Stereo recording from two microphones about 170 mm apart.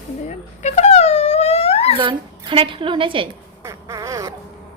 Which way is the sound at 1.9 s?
30° right (ahead or behind).